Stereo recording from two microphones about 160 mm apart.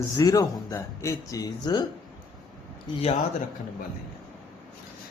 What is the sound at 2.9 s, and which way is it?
Speech, 30° left (ahead or behind).